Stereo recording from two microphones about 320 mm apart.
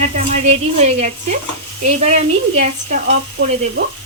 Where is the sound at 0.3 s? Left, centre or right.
Right.